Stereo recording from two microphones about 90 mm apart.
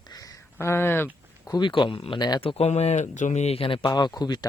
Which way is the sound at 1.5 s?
60° left (ahead or behind).